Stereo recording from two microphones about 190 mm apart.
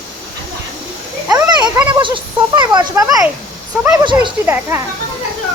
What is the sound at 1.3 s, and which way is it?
A child's voice, 20° right (ahead or behind).